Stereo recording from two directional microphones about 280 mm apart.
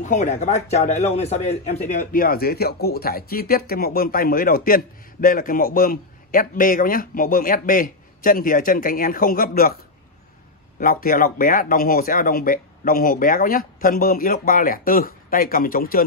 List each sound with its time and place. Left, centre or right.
0.0 s a man's voice: left
10.8 s speech: left